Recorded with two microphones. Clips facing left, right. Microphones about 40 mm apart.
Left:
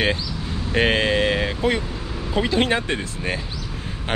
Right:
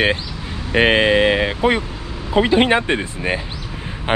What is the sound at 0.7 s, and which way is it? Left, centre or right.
Speech, right.